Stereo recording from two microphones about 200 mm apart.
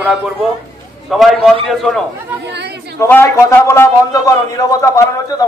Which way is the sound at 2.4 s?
55° right (ahead or behind).